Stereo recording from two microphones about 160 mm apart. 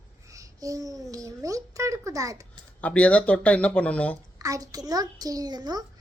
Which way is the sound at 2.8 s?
10° left (ahead or behind).